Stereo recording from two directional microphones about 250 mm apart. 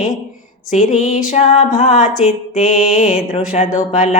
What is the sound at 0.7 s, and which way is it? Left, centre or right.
Music, left.